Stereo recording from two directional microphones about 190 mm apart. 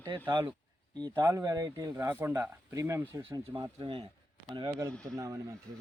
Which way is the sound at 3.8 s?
25° right (ahead or behind).